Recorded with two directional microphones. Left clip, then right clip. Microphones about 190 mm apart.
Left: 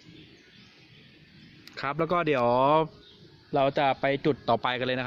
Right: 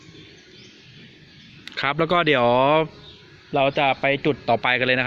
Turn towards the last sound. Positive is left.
turn(degrees=5)  # may be behind; listen again after turning